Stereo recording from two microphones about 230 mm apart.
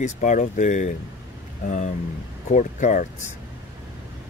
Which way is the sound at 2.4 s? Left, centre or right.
Left.